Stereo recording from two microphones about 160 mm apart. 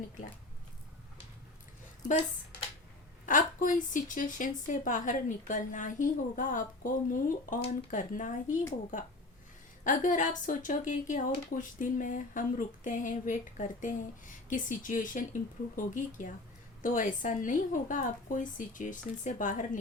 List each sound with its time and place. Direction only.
3.2 s speech: 55° left (ahead or behind)
9.8 s speech: 55° left (ahead or behind)